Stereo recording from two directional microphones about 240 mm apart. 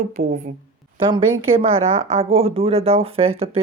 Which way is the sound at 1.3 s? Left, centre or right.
Right.